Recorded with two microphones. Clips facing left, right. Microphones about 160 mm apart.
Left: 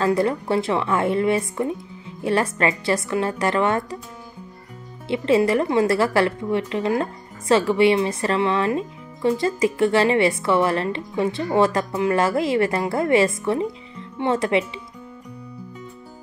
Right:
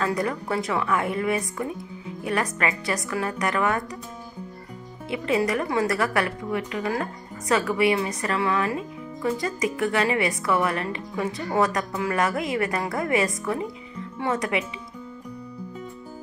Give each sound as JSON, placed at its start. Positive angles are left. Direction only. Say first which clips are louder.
{"t": 0.0, "sound": "a woman's voice", "louder": "left 6 dB", "side_deg": 30}
{"t": 5.0, "sound": "a woman's voice", "louder": "left 6 dB", "side_deg": 30}